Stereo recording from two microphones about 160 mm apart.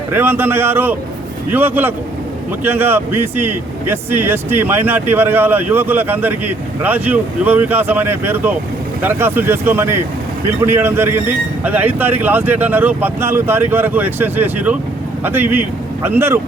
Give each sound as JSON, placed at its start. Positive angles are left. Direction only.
{"t": 0.1, "sound": "speech", "side_deg": -15}